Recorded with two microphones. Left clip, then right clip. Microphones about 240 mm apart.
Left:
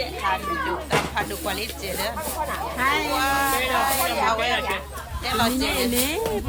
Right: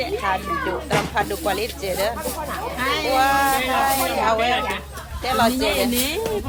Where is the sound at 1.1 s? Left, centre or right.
Centre.